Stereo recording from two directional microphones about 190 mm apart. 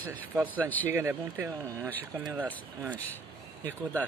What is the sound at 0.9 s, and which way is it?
Speech, 15° right (ahead or behind).